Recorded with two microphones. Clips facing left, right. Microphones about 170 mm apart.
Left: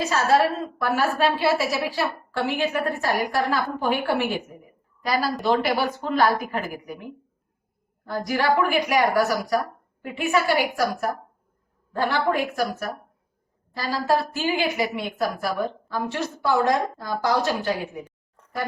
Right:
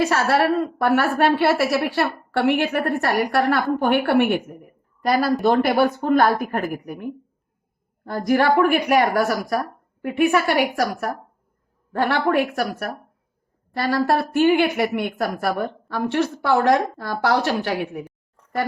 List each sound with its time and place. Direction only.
0.0 s a woman's voice: 65° right (ahead or behind)